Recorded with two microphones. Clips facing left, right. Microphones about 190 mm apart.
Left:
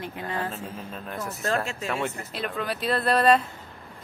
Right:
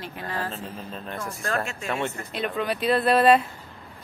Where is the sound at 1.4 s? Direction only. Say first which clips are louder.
Left 2 dB; 30° left (ahead or behind).